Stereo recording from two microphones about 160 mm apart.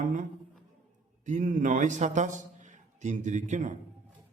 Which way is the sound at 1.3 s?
50° right (ahead or behind).